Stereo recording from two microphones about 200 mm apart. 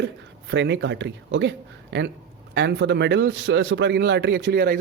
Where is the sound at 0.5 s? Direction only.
65° right (ahead or behind).